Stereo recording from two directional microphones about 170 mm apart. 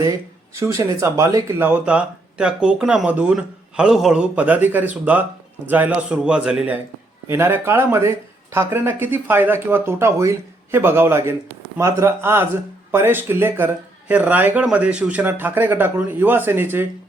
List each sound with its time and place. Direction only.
0.5 s speech: 15° right (ahead or behind)